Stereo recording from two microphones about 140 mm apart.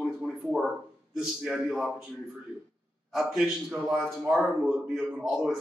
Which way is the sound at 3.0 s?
5° right (ahead or behind).